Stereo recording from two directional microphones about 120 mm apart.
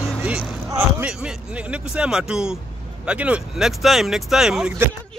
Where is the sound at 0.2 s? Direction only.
10° right (ahead or behind).